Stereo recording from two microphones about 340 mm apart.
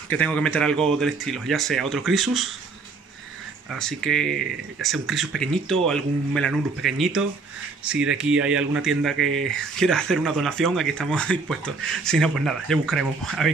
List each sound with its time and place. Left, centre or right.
0.1 s speech: centre
3.7 s speech: centre